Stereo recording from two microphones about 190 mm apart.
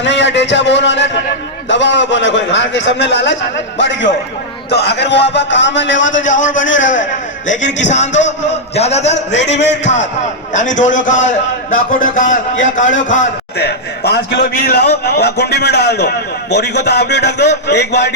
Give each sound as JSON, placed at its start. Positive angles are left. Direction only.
{"t": 0.0, "sound": "a man's voice", "side_deg": 70}
{"t": 6.1, "sound": "a man's voice", "side_deg": 40}
{"t": 6.6, "sound": "a man's voice", "side_deg": 80}
{"t": 7.8, "sound": "a man's voice", "side_deg": 40}
{"t": 9.1, "sound": "a man's voice", "side_deg": 70}
{"t": 10.5, "sound": "a man's voice", "side_deg": 40}
{"t": 13.6, "sound": "a man's voice", "side_deg": 60}